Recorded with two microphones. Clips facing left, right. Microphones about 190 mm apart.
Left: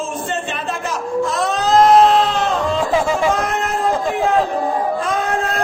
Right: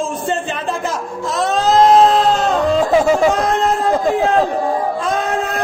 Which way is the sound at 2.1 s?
40° right (ahead or behind).